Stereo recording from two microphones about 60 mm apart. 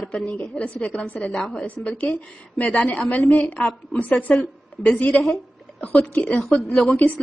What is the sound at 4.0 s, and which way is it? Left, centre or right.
Speech, left.